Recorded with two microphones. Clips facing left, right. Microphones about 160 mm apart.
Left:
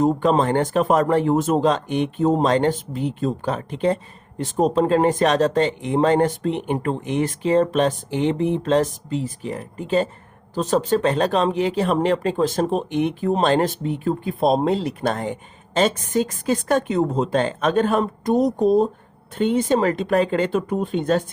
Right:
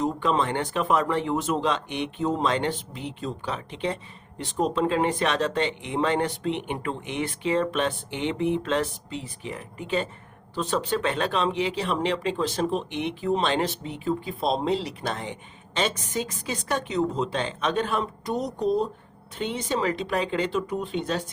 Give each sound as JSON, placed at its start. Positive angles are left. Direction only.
{"t": 0.0, "sound": "speech", "side_deg": 45}